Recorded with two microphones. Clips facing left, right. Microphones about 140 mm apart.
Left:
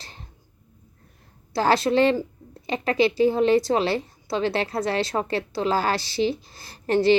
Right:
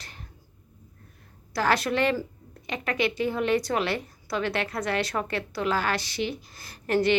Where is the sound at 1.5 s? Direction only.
25° left (ahead or behind).